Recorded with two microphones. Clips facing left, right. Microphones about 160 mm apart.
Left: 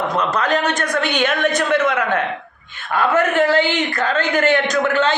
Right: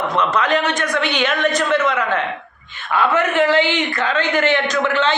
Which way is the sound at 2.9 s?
45° left (ahead or behind).